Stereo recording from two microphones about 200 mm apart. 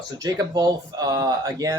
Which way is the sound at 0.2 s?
20° right (ahead or behind).